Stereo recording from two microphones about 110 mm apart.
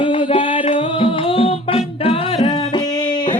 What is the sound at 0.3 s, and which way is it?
Music, 50° left (ahead or behind).